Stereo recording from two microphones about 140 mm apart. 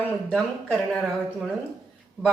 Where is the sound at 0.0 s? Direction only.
10° left (ahead or behind).